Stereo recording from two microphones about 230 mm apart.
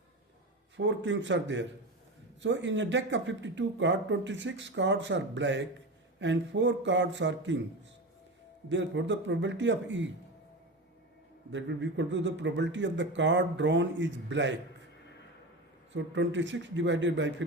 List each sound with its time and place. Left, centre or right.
0.8 s speech: right
8.7 s speech: right
11.5 s speech: right
15.9 s speech: right